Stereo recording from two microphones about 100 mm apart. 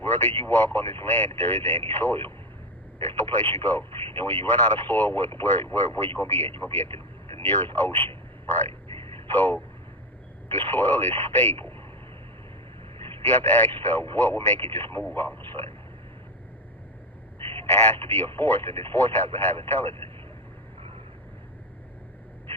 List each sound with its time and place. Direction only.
0.0 s a man's voice: 20° left (ahead or behind)
10.6 s speech: 20° left (ahead or behind)
13.3 s speech: 20° left (ahead or behind)
17.6 s speech: 25° left (ahead or behind)